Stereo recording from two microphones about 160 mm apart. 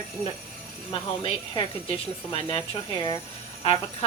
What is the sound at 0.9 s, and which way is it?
Speech, 30° left (ahead or behind).